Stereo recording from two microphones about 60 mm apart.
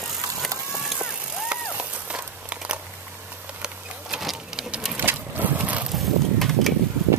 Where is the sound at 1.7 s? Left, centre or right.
Right.